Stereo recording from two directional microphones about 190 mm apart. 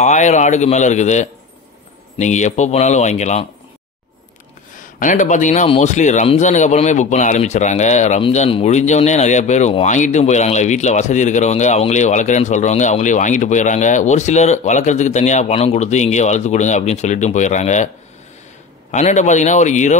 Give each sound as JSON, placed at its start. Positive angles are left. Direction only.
{"t": 0.0, "sound": "a man's voice", "side_deg": 40}
{"t": 4.9, "sound": "a man's voice", "side_deg": 45}
{"t": 18.9, "sound": "a man's voice", "side_deg": 40}